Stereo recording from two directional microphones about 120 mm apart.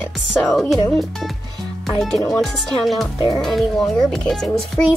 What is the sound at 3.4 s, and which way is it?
Speech, 5° left (ahead or behind).